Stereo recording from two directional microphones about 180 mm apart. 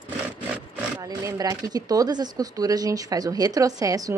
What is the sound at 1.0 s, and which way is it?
Speech, 20° right (ahead or behind).